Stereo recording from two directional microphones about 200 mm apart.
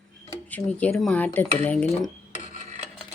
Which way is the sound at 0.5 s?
5° left (ahead or behind).